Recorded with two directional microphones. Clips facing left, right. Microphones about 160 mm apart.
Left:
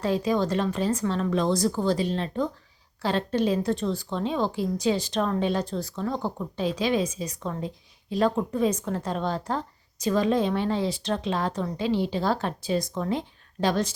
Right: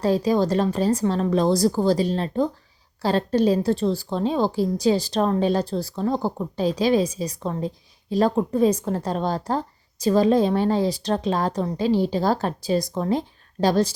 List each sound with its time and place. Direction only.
0.0 s a woman's voice: 35° right (ahead or behind)